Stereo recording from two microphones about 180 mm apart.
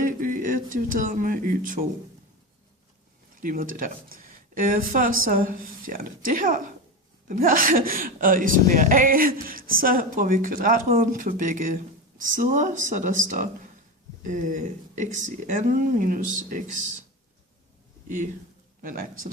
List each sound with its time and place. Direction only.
0.0 s speech: 45° right (ahead or behind)
3.4 s speech: 50° right (ahead or behind)
14.2 s speech: 45° right (ahead or behind)
18.8 s speech: 50° right (ahead or behind)